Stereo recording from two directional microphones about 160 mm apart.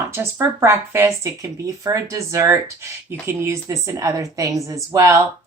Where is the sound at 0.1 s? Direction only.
15° right (ahead or behind).